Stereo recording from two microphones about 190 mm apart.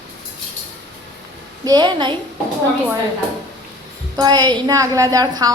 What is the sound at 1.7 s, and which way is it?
Speech, 25° right (ahead or behind).